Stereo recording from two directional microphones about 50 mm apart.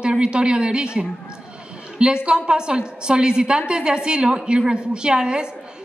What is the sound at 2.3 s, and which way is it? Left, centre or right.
A woman's voice, centre.